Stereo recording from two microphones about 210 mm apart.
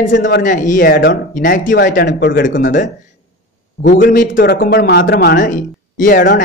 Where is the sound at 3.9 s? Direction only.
40° left (ahead or behind).